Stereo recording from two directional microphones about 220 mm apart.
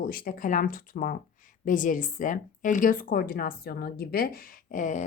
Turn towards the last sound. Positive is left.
turn(degrees=35)  # may be behind; listen again after turning